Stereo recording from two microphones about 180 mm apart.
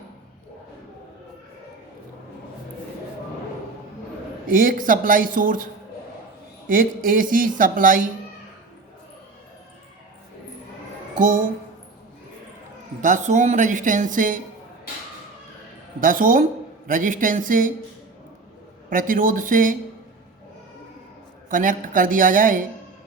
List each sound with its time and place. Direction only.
4.4 s speech: 50° right (ahead or behind)
6.7 s speech: 50° right (ahead or behind)
13.0 s speech: 45° right (ahead or behind)
16.0 s speech: 50° right (ahead or behind)
18.9 s speech: 50° right (ahead or behind)
21.5 s speech: 50° right (ahead or behind)